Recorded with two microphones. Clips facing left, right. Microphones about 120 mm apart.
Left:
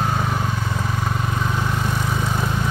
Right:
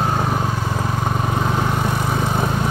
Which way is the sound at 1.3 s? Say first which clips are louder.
Right 4 dB; 35° right (ahead or behind).